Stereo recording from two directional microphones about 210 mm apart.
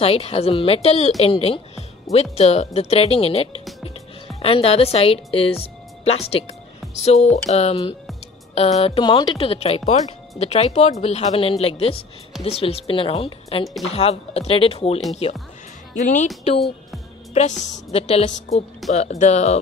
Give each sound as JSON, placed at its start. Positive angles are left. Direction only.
{"t": 0.0, "sound": "a woman's voice", "side_deg": 30}
{"t": 17.3, "sound": "a woman's voice", "side_deg": 30}